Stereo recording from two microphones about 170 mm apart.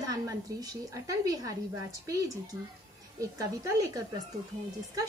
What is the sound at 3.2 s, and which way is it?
Speech, 20° right (ahead or behind).